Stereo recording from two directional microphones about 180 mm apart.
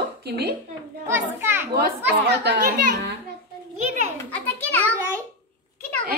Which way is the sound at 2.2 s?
65° right (ahead or behind).